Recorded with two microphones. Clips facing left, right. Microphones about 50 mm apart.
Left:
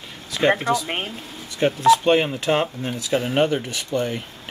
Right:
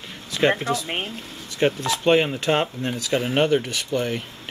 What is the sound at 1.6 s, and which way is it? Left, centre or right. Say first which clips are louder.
Speech: left 5 dB; centre.